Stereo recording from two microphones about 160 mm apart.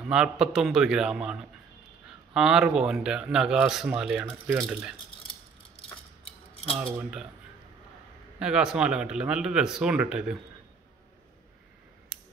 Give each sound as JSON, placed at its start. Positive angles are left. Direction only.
{"t": 0.1, "sound": "speech", "side_deg": -5}
{"t": 5.8, "sound": "mechanisms", "side_deg": 35}
{"t": 7.0, "sound": "speech", "side_deg": -5}
{"t": 8.4, "sound": "speech", "side_deg": -5}